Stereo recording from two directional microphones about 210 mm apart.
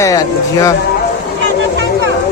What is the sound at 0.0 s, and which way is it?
Speech, 15° left (ahead or behind).